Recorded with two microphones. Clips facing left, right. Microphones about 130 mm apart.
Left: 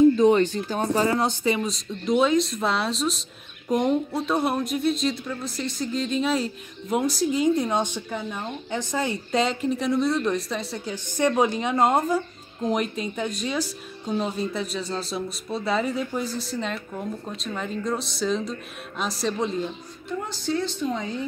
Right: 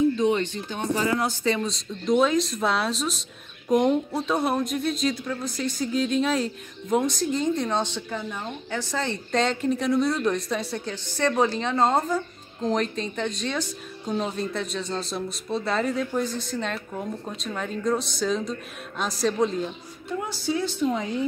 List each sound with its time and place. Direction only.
0.2 s speech: 40° left (ahead or behind)
1.2 s speech: 15° left (ahead or behind)
10.9 s a woman's voice: 15° left (ahead or behind); by 21.1 s 5° right (ahead or behind)